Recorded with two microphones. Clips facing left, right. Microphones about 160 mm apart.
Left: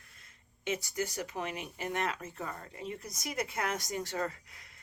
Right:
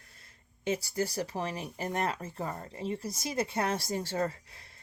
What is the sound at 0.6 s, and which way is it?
Speech, 35° right (ahead or behind).